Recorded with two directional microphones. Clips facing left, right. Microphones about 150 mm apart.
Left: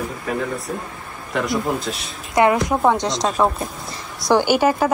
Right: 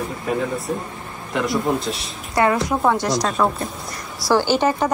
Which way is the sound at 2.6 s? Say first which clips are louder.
Left 1 dB; 20° left (ahead or behind).